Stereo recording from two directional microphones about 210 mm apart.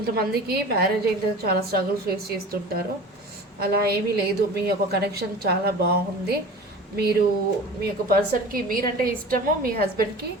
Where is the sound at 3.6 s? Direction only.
50° right (ahead or behind).